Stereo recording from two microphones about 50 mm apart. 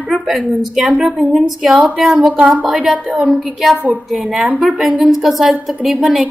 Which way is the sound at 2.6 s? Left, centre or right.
Centre.